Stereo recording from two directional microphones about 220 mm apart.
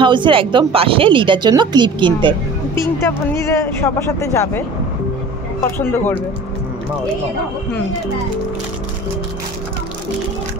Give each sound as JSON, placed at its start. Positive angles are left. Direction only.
{"t": 0.0, "sound": "speech", "side_deg": -20}
{"t": 3.5, "sound": "speech", "side_deg": 15}
{"t": 5.8, "sound": "speech", "side_deg": 10}